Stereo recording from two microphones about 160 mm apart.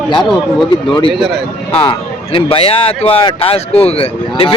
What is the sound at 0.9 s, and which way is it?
Speech, 30° left (ahead or behind).